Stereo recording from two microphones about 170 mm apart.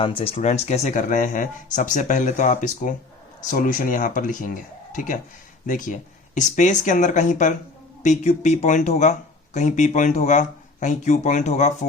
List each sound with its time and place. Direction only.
0.0 s speech: 30° left (ahead or behind)